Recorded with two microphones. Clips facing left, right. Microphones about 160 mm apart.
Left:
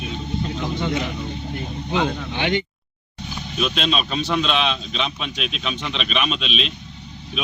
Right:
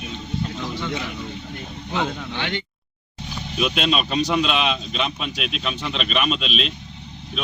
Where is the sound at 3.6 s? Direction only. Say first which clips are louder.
Right 1 dB; 5° right (ahead or behind).